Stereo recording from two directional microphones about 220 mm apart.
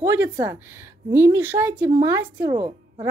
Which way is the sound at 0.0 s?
15° right (ahead or behind).